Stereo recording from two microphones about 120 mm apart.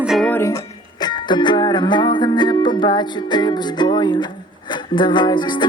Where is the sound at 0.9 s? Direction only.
35° left (ahead or behind).